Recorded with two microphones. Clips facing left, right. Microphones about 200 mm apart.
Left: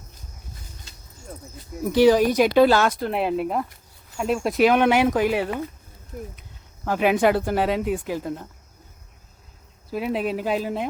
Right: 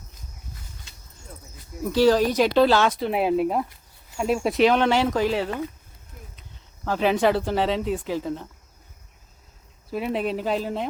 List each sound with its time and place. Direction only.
1.9 s speech: 15° left (ahead or behind); by 4.7 s centre (ahead or behind)
4.7 s speech: 15° left (ahead or behind)
6.8 s speech: 10° left (ahead or behind)
9.9 s speech: centre (ahead or behind)